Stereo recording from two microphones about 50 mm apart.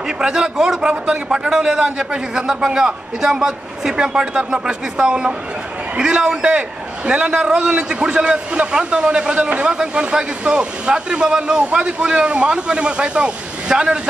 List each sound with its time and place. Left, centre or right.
0.2 s a man's voice: centre